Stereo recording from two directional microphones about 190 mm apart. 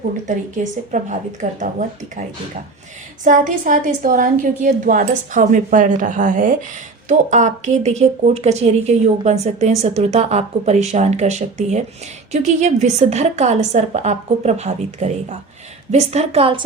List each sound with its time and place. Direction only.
0.3 s a woman's voice: 40° right (ahead or behind)
3.2 s a woman's voice: 45° right (ahead or behind); by 16.6 s 30° right (ahead or behind)